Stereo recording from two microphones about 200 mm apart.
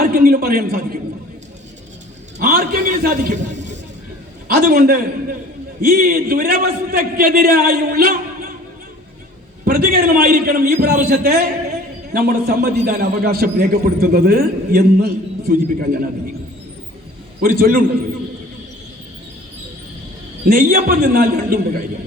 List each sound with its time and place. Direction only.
0.0 s speech: 45° right (ahead or behind)
2.4 s a man's voice: 50° right (ahead or behind)
9.6 s a man's voice: 50° right (ahead or behind)
17.4 s a man's voice: 50° right (ahead or behind)
20.5 s a man's voice: 50° right (ahead or behind)